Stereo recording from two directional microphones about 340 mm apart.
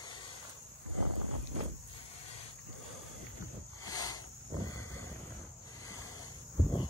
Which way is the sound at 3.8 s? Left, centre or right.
Centre.